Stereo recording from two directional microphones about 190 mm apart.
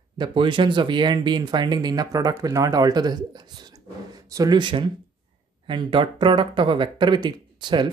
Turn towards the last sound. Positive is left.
turn(degrees=-25)  # may be behind; listen again after turning